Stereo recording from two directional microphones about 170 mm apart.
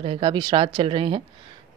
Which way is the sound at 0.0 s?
35° right (ahead or behind).